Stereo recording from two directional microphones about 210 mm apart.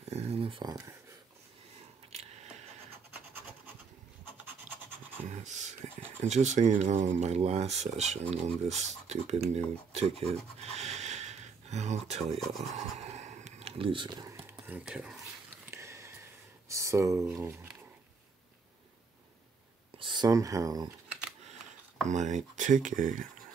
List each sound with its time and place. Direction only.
0.1 s a sound: 30° right (ahead or behind)
5.3 s whispering: 35° right (ahead or behind)
6.2 s speech: 35° right (ahead or behind)
9.5 s rub: 30° right (ahead or behind)
12.4 s speech: centre (ahead or behind)
12.7 s a sound: 30° right (ahead or behind); by 17.3 s 15° right (ahead or behind)
20.0 s speech: 20° right (ahead or behind)
22.0 s speech: 35° right (ahead or behind)